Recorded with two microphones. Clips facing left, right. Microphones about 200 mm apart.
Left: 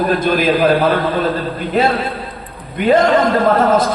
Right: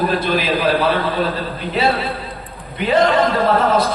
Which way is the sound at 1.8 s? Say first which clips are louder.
Left 3 dB; 45° left (ahead or behind).